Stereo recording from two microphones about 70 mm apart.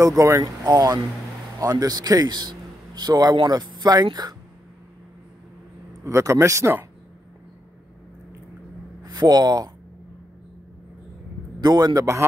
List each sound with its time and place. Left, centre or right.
0.0 s speech: right
0.4 s a man's voice: right
6.0 s speech: right
9.0 s speech: right
11.6 s a man's voice: right